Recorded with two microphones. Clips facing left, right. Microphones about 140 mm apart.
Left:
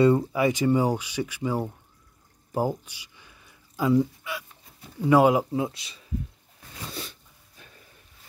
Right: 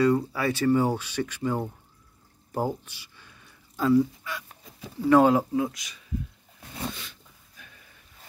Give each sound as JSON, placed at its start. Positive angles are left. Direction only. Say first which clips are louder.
{"t": 0.0, "sound": "speech", "louder": "left 3 dB", "side_deg": 20}
{"t": 2.5, "sound": "a sound", "louder": "left 2 dB", "side_deg": 10}
{"t": 3.9, "sound": "speech", "louder": "right 2 dB", "side_deg": 10}
{"t": 5.5, "sound": "speech", "louder": "right 1 dB", "side_deg": 30}
{"t": 6.9, "sound": "dog", "louder": "left 3 dB", "side_deg": 35}